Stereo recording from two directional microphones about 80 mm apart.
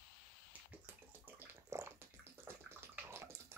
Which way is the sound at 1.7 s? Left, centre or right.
Right.